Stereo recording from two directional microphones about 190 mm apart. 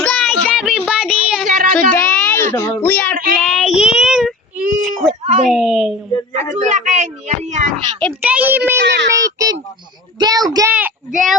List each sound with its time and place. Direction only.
0.0 s child singing: 5° left (ahead or behind)
1.7 s child singing: 5° left (ahead or behind)
4.5 s whimper: 45° right (ahead or behind)
5.2 s a sound: 35° right (ahead or behind)
5.5 s a sound: centre (ahead or behind)
6.3 s a woman's voice: 40° right (ahead or behind)
8.0 s a child's voice: 5° right (ahead or behind)
8.8 s a child's voice: 65° right (ahead or behind)
9.2 s a child's voice: 20° right (ahead or behind)
10.7 s a child's voice: 10° right (ahead or behind)